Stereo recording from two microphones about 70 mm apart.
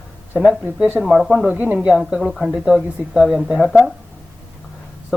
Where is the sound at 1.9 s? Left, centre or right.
Centre.